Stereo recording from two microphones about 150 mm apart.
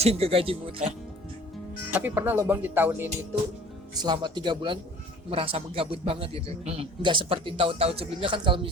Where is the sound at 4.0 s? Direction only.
30° right (ahead or behind).